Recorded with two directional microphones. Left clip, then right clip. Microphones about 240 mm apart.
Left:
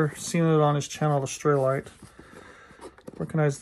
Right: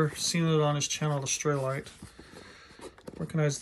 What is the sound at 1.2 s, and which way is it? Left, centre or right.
Speech, centre.